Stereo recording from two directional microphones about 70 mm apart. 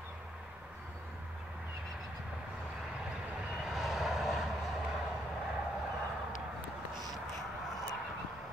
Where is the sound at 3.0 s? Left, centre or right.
Centre.